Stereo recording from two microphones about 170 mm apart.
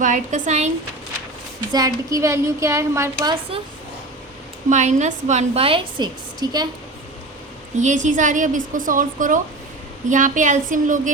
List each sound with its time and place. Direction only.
0.0 s a woman's voice: 45° right (ahead or behind)
1.7 s speech: 20° right (ahead or behind)
4.7 s a woman's voice: 45° right (ahead or behind); by 6.7 s 25° right (ahead or behind)
7.8 s a woman's voice: 45° right (ahead or behind)